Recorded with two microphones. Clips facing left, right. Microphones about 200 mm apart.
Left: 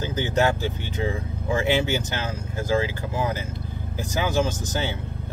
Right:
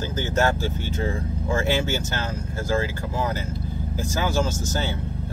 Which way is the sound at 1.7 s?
15° left (ahead or behind).